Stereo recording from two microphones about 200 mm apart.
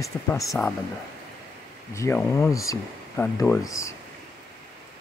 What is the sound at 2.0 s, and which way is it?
Speech, 15° left (ahead or behind).